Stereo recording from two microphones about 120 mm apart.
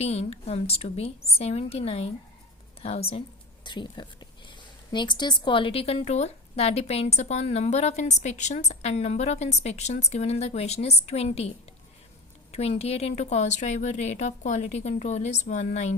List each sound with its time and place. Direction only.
0.0 s speech: 60° left (ahead or behind)
3.6 s a woman's voice: 40° left (ahead or behind); by 16.0 s 75° left (ahead or behind)